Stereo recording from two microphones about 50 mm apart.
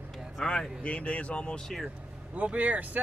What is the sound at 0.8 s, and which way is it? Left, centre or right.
Speech, left.